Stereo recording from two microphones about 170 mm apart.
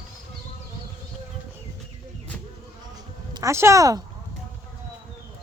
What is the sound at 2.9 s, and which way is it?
Insect, 20° right (ahead or behind).